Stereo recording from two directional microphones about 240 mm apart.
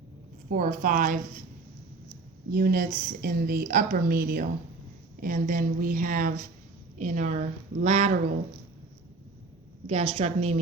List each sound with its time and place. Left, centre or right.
0.5 s speech: right
2.5 s speech: right
9.8 s a woman's voice: right